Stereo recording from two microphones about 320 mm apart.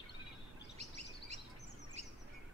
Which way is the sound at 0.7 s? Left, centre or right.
Right.